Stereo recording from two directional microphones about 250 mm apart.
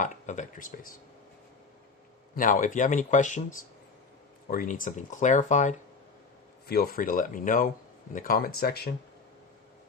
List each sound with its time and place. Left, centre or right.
0.0 s speech: left
2.3 s speech: left
4.4 s speech: left